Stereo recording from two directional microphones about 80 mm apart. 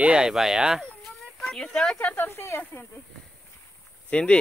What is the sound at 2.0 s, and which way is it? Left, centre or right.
Speech, left.